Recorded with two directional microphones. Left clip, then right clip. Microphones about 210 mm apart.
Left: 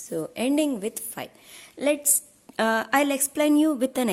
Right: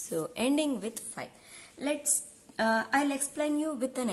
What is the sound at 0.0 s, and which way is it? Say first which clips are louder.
A woman's voice: left 3 dB; 15° left (ahead or behind).